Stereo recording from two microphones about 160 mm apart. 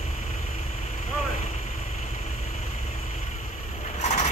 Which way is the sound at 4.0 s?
45° left (ahead or behind).